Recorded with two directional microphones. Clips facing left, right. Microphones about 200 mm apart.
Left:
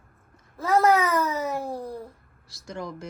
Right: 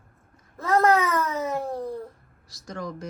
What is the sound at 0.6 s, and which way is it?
Wail, centre (ahead or behind).